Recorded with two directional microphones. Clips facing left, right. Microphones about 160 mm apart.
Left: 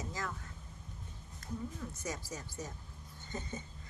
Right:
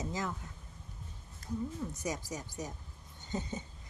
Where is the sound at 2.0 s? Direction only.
15° right (ahead or behind).